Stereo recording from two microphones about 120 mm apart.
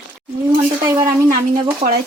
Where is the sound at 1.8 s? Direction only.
60° right (ahead or behind).